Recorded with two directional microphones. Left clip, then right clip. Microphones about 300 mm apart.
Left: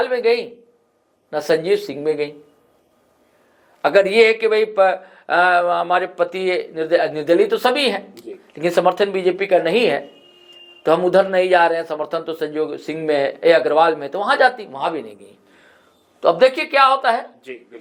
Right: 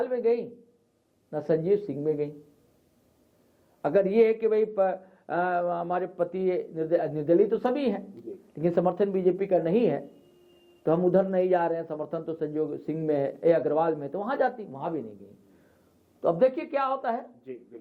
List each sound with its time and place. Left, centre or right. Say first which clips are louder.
0.0 s speech: left 9 dB; centre
3.8 s a man's voice: left 9 dB; centre